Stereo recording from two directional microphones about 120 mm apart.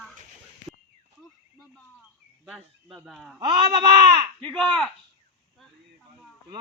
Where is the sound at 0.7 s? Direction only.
Centre (ahead or behind).